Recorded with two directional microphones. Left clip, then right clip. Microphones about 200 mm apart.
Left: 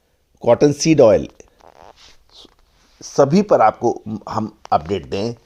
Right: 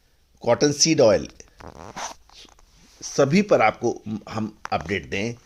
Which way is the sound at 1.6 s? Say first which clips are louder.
Right 3 dB; 5° right (ahead or behind).